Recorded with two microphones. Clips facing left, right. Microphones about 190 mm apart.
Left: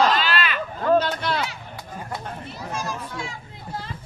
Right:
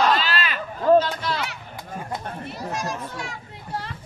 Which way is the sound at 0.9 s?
60° left (ahead or behind).